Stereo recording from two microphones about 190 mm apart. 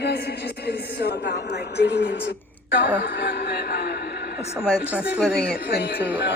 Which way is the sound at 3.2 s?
60° left (ahead or behind).